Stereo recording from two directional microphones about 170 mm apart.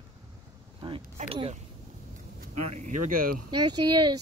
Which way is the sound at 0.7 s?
30° right (ahead or behind).